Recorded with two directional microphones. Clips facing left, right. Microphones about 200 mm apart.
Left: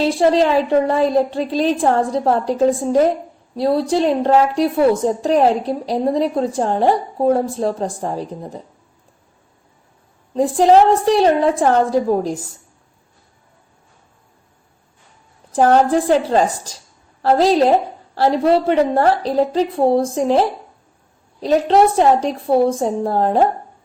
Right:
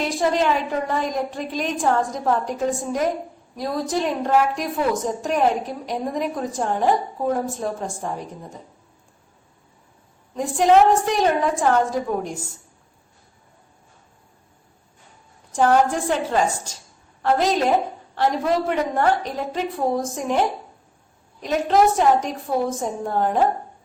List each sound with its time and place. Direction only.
0.0 s a woman's voice: 30° left (ahead or behind)
10.3 s a woman's voice: 35° left (ahead or behind)
15.5 s a woman's voice: 35° left (ahead or behind)